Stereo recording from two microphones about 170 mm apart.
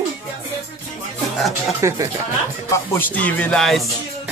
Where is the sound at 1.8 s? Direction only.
15° right (ahead or behind).